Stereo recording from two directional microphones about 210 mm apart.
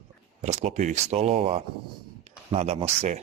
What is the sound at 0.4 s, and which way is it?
A man's voice, 35° right (ahead or behind).